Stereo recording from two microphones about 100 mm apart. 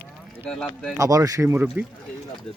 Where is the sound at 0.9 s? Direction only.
35° right (ahead or behind).